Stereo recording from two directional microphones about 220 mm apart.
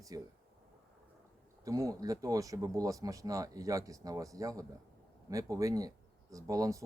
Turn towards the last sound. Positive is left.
turn(degrees=-15)  # may be behind; listen again after turning